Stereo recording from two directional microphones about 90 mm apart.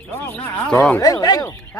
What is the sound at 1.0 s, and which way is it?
Speech, 45° left (ahead or behind).